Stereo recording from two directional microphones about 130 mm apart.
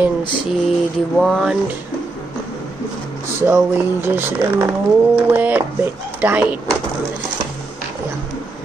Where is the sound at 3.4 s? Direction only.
15° right (ahead or behind).